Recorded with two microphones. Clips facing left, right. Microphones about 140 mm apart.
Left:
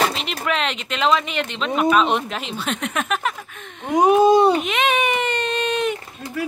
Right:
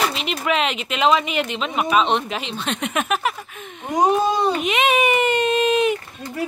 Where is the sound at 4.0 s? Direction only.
10° left (ahead or behind).